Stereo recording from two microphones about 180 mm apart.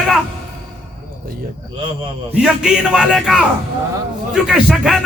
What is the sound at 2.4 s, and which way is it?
Speech, 5° right (ahead or behind).